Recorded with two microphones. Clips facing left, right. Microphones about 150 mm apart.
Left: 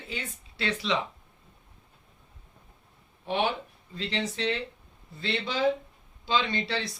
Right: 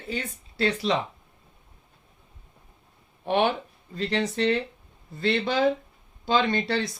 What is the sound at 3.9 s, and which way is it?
Speech, 45° right (ahead or behind).